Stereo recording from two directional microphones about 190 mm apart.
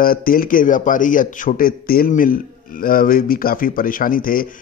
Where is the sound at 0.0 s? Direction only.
50° left (ahead or behind).